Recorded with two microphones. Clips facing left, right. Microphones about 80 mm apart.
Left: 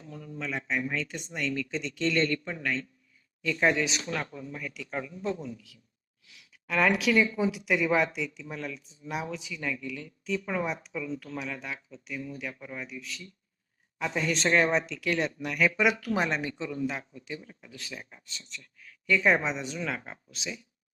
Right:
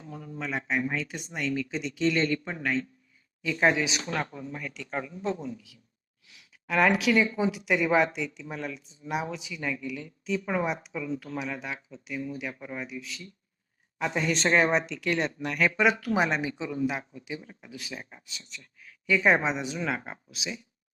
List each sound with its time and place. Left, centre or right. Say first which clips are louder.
0.0 s a sound: right 1 dB; centre
0.9 s speech: right 1 dB; centre
4.9 s speech: right 1 dB; centre
12.9 s speech: right 2 dB; centre